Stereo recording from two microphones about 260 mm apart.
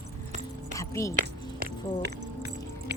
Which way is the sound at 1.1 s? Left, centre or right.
Right.